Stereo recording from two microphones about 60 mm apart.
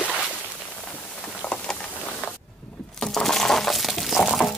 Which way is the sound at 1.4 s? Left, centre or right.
Centre.